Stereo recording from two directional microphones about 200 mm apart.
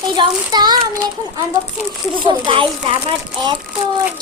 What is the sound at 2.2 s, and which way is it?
Child singing, 25° right (ahead or behind).